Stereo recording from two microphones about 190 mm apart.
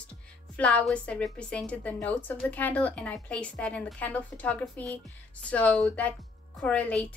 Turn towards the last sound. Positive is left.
turn(degrees=5)  # may be behind; listen again after turning